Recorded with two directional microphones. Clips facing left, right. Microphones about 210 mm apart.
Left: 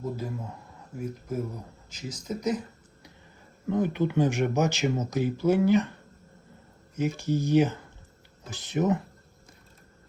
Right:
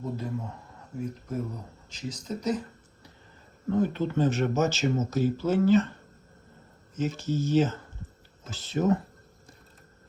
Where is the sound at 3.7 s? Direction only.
15° left (ahead or behind).